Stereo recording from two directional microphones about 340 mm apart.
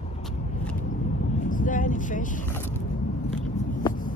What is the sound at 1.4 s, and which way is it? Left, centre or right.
Vehicle, left.